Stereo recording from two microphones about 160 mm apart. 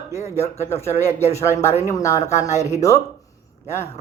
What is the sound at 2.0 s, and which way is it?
Speech, 20° left (ahead or behind).